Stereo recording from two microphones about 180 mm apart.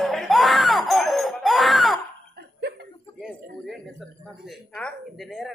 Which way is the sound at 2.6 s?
60° right (ahead or behind).